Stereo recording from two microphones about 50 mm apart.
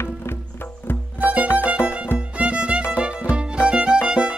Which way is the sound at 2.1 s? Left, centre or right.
Right.